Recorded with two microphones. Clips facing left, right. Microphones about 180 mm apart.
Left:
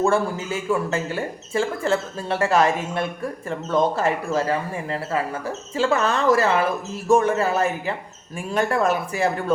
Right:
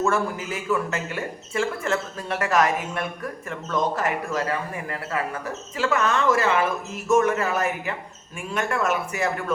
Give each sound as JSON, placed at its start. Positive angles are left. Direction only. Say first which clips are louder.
{"t": 0.0, "sound": "speech", "louder": "left 3 dB", "side_deg": 30}